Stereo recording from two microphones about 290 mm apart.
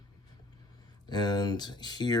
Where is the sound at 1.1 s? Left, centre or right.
Centre.